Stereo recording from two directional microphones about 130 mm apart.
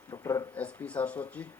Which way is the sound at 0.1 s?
25° left (ahead or behind).